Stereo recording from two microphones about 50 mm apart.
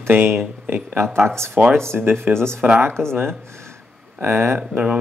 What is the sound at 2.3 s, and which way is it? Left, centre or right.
Speech, centre.